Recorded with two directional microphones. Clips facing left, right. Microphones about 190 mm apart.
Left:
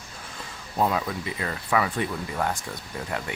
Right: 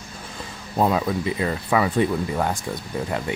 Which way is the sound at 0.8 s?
30° right (ahead or behind).